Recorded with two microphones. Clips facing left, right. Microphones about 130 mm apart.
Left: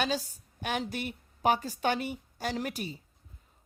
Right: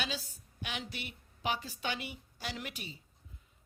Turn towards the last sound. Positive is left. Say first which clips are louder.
# left 9 dB
turn(degrees=40)  # may be behind; listen again after turning